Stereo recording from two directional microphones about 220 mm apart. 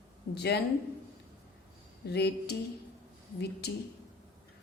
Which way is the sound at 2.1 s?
50° left (ahead or behind).